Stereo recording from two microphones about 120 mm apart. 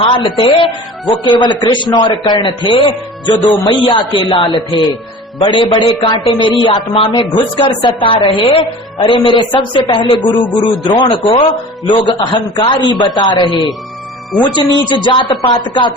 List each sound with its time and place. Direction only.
0.3 s a man's voice: 45° left (ahead or behind)